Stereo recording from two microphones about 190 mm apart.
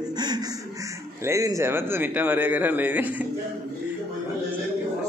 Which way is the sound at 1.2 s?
15° right (ahead or behind).